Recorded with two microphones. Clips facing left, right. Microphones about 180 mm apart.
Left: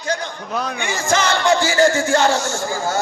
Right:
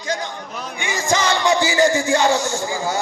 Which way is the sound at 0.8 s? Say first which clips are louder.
Right 1 dB; 15° right (ahead or behind).